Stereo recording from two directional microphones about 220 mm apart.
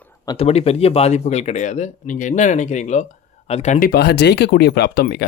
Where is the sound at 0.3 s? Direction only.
30° left (ahead or behind).